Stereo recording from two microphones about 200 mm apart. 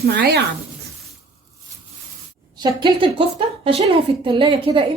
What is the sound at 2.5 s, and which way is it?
A woman's voice, 20° right (ahead or behind).